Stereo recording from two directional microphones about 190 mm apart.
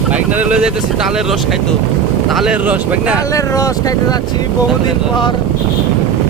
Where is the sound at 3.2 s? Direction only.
15° left (ahead or behind).